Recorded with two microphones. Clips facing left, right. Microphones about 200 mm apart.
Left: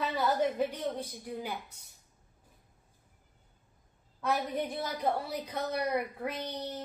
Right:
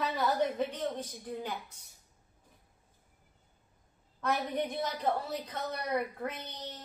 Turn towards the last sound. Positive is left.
turn(degrees=10)  # may be behind; listen again after turning